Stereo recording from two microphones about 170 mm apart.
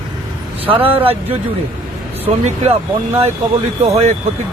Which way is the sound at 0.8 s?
35° right (ahead or behind).